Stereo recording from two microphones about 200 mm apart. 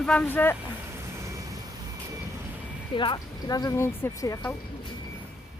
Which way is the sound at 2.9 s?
25° left (ahead or behind).